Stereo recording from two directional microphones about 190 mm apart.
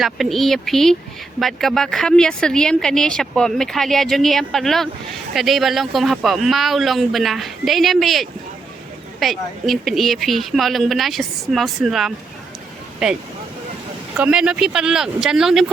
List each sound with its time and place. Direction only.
0.0 s speech: centre (ahead or behind)
14.2 s speech: 5° right (ahead or behind)